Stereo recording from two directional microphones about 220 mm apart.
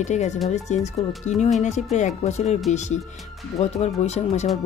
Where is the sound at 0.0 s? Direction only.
30° left (ahead or behind).